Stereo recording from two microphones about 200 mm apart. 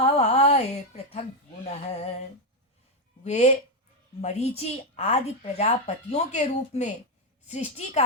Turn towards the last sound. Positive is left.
turn(degrees=35)  # may be behind; listen again after turning